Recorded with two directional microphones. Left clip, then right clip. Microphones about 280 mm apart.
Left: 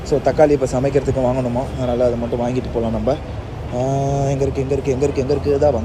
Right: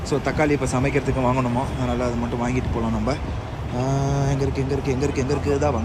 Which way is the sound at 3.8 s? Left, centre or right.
Right.